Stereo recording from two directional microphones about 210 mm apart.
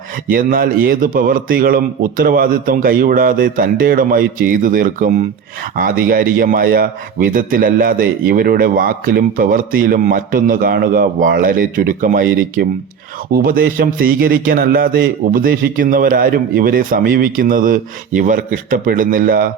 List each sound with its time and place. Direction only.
0.3 s a man's voice: 40° right (ahead or behind)